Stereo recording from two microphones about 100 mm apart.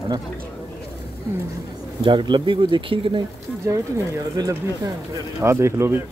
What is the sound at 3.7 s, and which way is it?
Speech, 30° right (ahead or behind).